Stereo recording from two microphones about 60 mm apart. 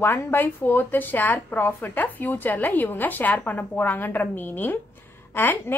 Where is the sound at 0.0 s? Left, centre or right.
Left.